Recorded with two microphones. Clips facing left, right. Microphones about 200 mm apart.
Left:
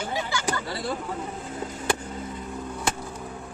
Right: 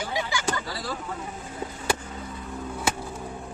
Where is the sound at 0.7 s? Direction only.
25° left (ahead or behind).